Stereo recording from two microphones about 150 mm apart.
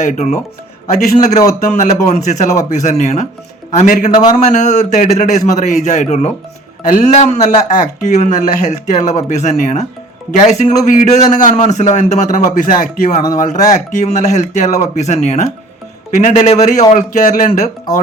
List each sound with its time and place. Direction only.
0.1 s speech: 50° left (ahead or behind)